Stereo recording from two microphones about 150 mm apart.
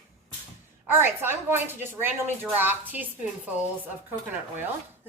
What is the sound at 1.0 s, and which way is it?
A woman's voice, 15° right (ahead or behind).